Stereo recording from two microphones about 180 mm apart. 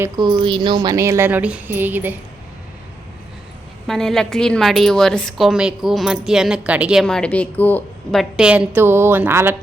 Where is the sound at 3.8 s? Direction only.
Centre (ahead or behind).